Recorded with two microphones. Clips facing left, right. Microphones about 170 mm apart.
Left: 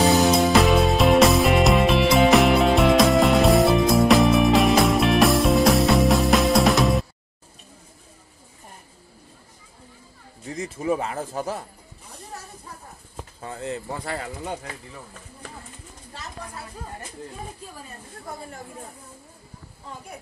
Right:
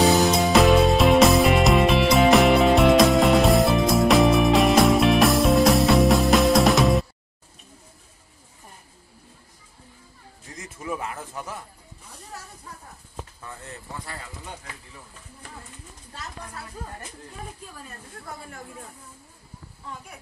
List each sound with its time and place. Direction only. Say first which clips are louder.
0.0 s music: left 1 dB; centre (ahead or behind)
10.6 s a sound: left 7 dB; 25° left (ahead or behind)
13.5 s speech: left 13 dB; 90° left; by 14.5 s 75° left (ahead or behind)